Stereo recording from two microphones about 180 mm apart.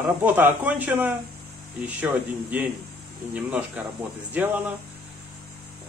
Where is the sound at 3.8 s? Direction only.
10° right (ahead or behind).